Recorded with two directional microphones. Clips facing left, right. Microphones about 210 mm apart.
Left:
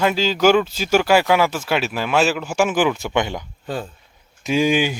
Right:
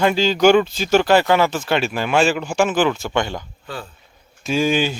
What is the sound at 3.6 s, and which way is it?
Speech, 40° left (ahead or behind).